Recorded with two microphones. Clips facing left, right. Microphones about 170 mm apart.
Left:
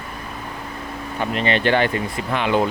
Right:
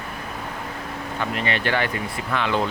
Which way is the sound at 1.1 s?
25° left (ahead or behind).